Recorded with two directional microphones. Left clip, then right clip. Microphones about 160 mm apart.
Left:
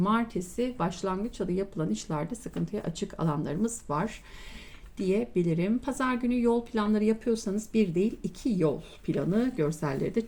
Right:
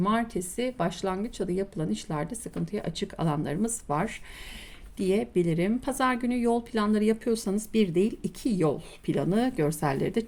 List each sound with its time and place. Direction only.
0.0 s speech: 25° right (ahead or behind)